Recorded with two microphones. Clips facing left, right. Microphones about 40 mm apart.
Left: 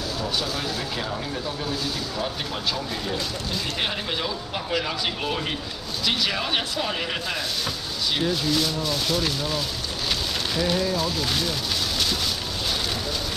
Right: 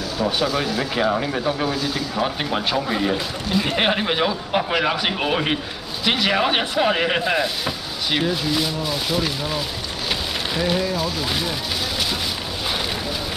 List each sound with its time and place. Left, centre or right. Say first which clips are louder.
0.6 s speech: right 6 dB; right
1.0 s speech: right 9 dB; right; by 11.5 s centre